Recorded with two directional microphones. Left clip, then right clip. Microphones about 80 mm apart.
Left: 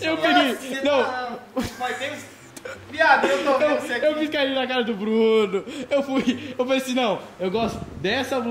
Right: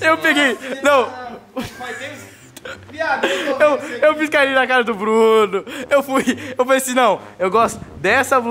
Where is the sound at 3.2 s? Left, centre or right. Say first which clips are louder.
Right 3 dB; right.